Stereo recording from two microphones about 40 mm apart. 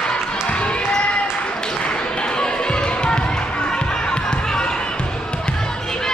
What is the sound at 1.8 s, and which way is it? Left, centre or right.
Music, left.